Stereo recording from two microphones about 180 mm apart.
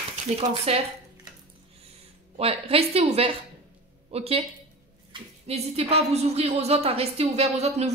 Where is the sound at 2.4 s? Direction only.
35° right (ahead or behind).